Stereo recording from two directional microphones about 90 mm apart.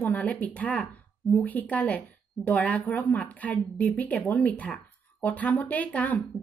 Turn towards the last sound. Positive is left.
turn(degrees=15)  # may be behind; listen again after turning